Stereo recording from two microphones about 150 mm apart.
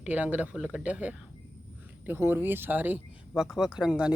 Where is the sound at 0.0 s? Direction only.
10° right (ahead or behind).